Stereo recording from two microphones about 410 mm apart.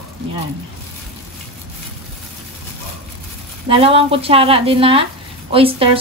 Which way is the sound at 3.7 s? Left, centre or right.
Centre.